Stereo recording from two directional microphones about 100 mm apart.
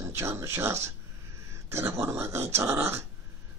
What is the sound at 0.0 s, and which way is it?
Speech, 30° right (ahead or behind).